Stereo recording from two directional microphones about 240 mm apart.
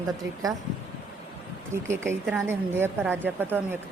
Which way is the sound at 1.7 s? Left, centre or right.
Centre.